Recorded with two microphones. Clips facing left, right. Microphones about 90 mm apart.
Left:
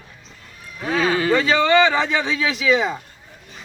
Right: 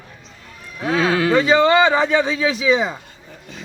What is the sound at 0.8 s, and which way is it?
Speech, 65° right (ahead or behind).